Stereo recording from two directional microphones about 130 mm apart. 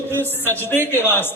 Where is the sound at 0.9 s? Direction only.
15° left (ahead or behind).